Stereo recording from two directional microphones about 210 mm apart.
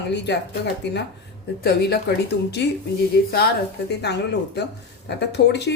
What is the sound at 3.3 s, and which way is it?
Speech, 50° left (ahead or behind).